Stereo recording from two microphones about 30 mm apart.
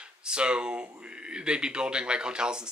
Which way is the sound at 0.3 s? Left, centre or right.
Right.